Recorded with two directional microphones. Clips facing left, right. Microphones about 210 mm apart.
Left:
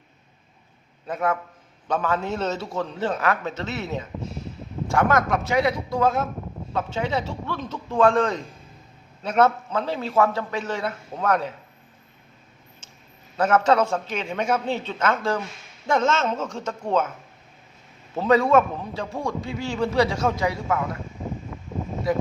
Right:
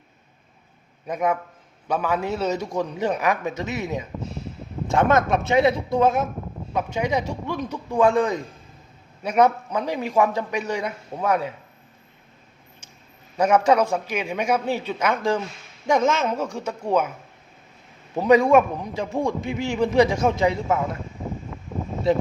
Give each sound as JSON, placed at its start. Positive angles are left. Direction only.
{"t": 1.0, "sound": "a man's voice", "side_deg": -15}
{"t": 13.3, "sound": "a man's voice", "side_deg": -10}
{"t": 18.1, "sound": "a man's voice", "side_deg": -15}
{"t": 22.1, "sound": "a man's voice", "side_deg": -25}